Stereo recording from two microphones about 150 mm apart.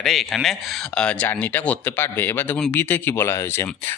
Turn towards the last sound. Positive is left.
turn(degrees=15)  # may be behind; listen again after turning